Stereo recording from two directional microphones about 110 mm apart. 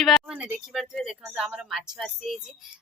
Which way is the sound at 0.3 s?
10° right (ahead or behind).